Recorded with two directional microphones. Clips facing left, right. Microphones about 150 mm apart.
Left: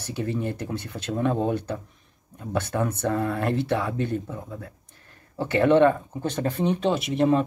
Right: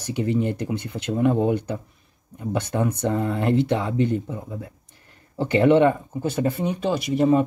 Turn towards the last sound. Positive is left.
turn(degrees=0)  # may be behind; listen again after turning